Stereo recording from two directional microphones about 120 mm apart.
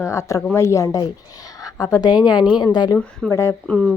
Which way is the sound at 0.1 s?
25° left (ahead or behind).